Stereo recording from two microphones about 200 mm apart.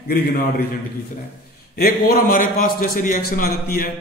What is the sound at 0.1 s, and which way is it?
Speech, 45° left (ahead or behind).